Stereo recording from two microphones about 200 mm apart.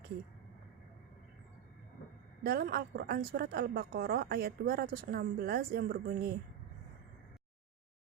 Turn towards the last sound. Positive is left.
turn(degrees=-50)  # may be behind; listen again after turning